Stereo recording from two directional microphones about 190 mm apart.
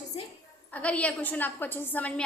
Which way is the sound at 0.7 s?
5° left (ahead or behind).